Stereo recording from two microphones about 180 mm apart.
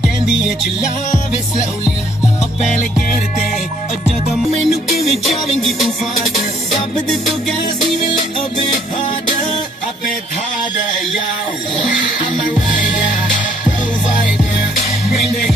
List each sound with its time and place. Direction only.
4.4 s music: centre (ahead or behind)